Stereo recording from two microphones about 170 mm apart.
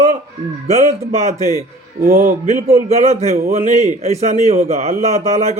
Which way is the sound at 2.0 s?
55° right (ahead or behind).